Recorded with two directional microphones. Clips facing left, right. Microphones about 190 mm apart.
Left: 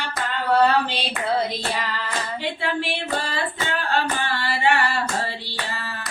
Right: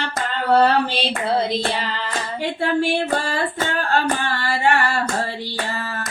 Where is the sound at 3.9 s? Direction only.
45° right (ahead or behind).